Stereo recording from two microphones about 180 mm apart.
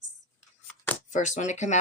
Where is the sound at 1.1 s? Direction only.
40° left (ahead or behind).